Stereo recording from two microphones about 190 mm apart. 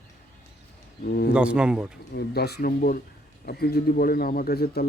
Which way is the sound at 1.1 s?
55° left (ahead or behind).